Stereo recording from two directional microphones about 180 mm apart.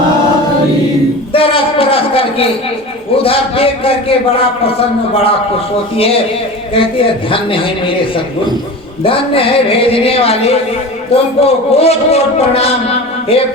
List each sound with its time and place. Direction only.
1.3 s a sound: 30° left (ahead or behind)
3.2 s a man's voice: 30° left (ahead or behind)
6.7 s a man's voice: 30° left (ahead or behind)